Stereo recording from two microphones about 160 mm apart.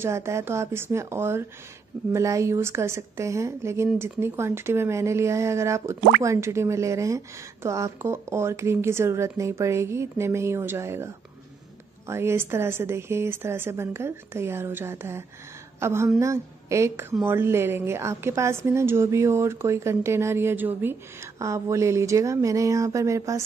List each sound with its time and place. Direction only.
0.0 s a woman's voice: 15° right (ahead or behind)
12.1 s a woman's voice: 15° right (ahead or behind)